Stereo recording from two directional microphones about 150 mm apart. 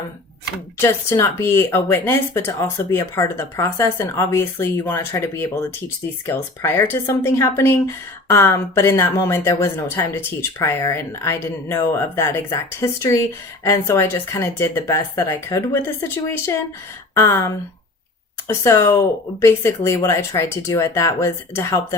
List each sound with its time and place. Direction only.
0.8 s speech: 15° left (ahead or behind)